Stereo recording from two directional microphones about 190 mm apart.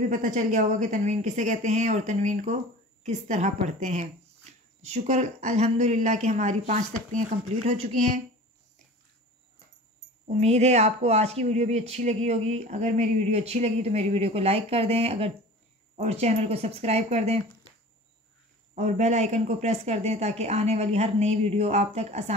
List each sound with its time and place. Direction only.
0.1 s a woman's voice: 40° right (ahead or behind)
10.2 s a woman's voice: 35° right (ahead or behind)
18.8 s a woman's voice: 40° right (ahead or behind)